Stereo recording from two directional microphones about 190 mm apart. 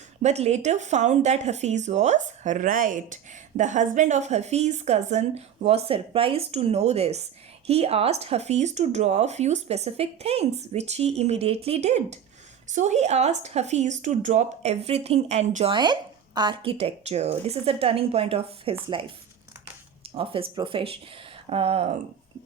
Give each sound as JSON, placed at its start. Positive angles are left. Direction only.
{"t": 0.2, "sound": "speech", "side_deg": -35}
{"t": 15.7, "sound": "speech", "side_deg": -25}
{"t": 20.1, "sound": "speech", "side_deg": -30}